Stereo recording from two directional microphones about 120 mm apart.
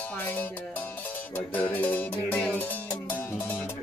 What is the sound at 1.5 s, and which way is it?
Music, 15° left (ahead or behind).